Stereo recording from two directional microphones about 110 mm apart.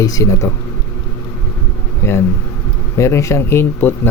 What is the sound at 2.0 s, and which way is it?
A man's voice, 25° left (ahead or behind).